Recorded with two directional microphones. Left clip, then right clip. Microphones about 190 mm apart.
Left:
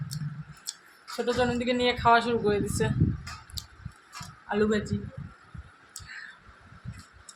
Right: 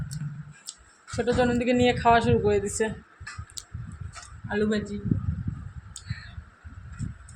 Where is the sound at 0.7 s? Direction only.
5° right (ahead or behind).